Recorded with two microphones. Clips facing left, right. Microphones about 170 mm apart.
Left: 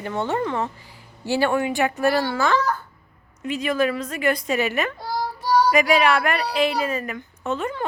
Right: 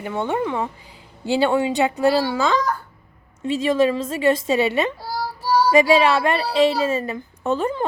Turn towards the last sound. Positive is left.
turn(degrees=-35)  # may be behind; listen again after turning